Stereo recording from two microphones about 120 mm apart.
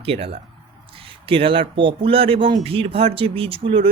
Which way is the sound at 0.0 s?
55° right (ahead or behind).